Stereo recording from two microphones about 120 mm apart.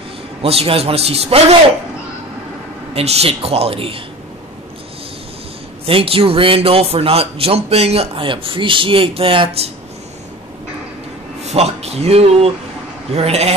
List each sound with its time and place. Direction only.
0.4 s speech: 55° right (ahead or behind)
2.9 s speech: 60° right (ahead or behind)
5.9 s a man's voice: 50° right (ahead or behind)
11.4 s speech: 60° right (ahead or behind)